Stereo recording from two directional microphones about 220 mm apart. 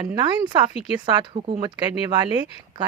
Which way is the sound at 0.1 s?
20° right (ahead or behind).